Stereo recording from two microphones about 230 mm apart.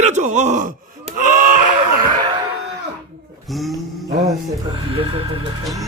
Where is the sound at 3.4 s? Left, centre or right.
Centre.